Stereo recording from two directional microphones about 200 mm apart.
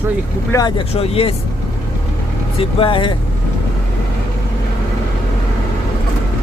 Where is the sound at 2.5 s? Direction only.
25° left (ahead or behind).